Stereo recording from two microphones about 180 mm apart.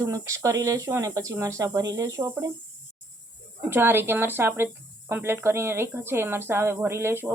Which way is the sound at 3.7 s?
10° right (ahead or behind).